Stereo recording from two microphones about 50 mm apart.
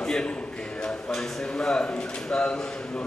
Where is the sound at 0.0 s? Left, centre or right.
Centre.